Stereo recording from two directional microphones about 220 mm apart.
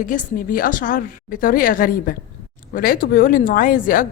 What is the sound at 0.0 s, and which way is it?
Speech, 35° left (ahead or behind).